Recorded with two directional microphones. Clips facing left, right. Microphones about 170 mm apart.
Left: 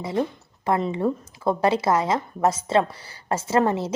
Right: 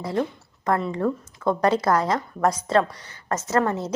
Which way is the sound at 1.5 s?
5° left (ahead or behind).